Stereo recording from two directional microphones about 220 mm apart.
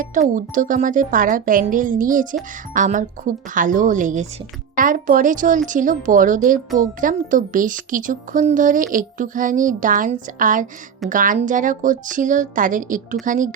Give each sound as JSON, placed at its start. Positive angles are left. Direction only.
{"t": 0.0, "sound": "speech", "side_deg": -35}